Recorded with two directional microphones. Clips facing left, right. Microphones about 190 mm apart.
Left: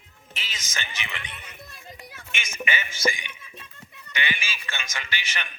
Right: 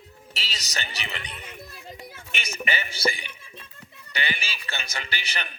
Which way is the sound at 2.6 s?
35° right (ahead or behind).